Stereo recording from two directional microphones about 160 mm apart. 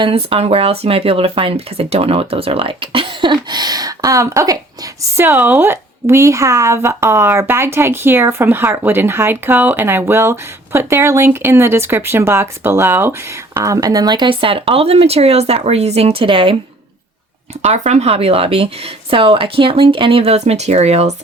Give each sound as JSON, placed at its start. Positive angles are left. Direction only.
{"t": 0.0, "sound": "a woman's voice", "side_deg": -35}
{"t": 17.6, "sound": "speech", "side_deg": -45}